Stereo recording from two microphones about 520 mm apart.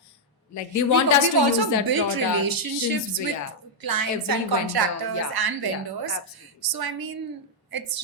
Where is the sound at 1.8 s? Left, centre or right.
Right.